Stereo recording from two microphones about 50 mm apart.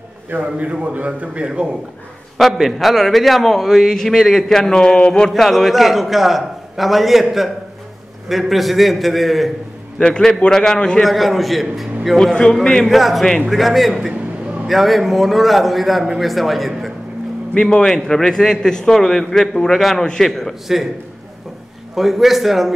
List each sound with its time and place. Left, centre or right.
0.3 s a man's voice: right
2.3 s a man's voice: centre
5.3 s a man's voice: centre
9.9 s a man's voice: centre
11.0 s a man's voice: centre
17.6 s a man's voice: centre
20.6 s a man's voice: centre
21.9 s a man's voice: centre